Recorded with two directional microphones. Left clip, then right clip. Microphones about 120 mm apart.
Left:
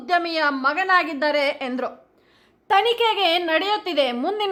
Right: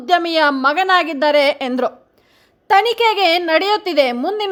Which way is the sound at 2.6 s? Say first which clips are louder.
Right 5 dB; 30° right (ahead or behind).